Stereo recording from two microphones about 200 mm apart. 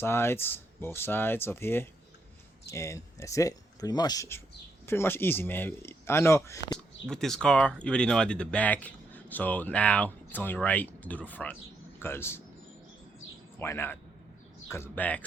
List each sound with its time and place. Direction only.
0.0 s speech: 10° left (ahead or behind)
6.7 s speech: 5° left (ahead or behind)
13.6 s speech: 10° left (ahead or behind)